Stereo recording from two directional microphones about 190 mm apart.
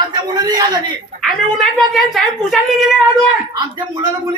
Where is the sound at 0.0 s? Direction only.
20° right (ahead or behind).